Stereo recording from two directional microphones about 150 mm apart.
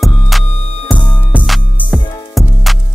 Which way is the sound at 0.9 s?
30° left (ahead or behind).